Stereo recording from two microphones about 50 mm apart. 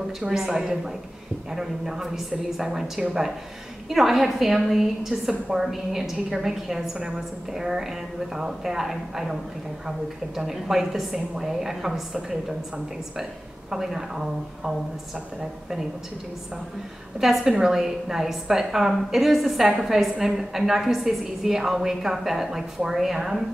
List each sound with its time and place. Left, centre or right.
0.3 s a woman's voice: centre
17.2 s a woman's voice: centre